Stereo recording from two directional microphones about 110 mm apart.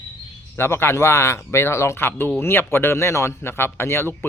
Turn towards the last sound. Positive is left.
turn(degrees=25)  # may be behind; listen again after turning